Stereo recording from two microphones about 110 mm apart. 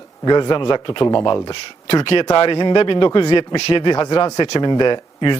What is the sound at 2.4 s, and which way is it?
A man's voice, 45° left (ahead or behind).